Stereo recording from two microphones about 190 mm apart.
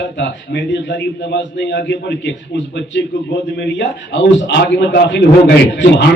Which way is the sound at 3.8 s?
65° left (ahead or behind).